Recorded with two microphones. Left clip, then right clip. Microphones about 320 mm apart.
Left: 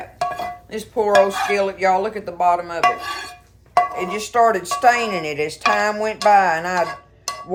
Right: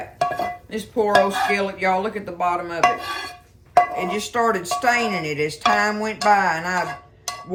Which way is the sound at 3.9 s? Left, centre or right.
Centre.